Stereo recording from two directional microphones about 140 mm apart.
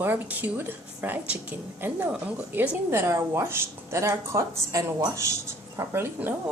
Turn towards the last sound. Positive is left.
turn(degrees=-15)  # may be behind; listen again after turning